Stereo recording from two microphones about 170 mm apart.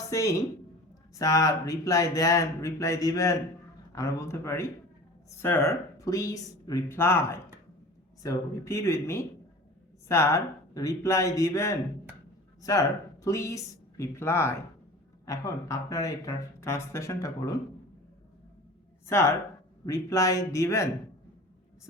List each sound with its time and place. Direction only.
0.1 s speech: 20° left (ahead or behind)
13.2 s speech: 20° left (ahead or behind)
19.0 s speech: 15° left (ahead or behind)